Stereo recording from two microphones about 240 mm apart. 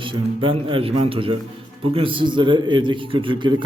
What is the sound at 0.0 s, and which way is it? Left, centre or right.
A man's voice, right.